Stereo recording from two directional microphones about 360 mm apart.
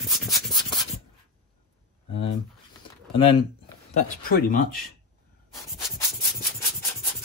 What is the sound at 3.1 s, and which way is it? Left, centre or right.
Speech, left.